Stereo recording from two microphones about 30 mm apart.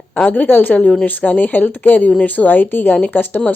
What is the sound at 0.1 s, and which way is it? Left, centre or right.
Speech, left.